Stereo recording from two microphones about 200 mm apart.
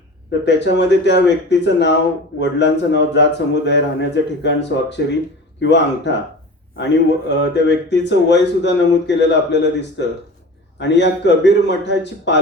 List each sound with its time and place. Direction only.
0.3 s speech: 60° left (ahead or behind)
10.8 s speech: 60° left (ahead or behind)